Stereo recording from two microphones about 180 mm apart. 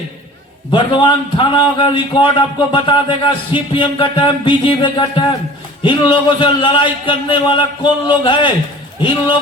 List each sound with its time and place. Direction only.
0.7 s speech: 25° left (ahead or behind)